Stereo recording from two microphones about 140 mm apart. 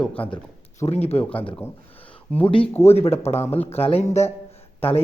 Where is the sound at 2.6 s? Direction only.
15° left (ahead or behind).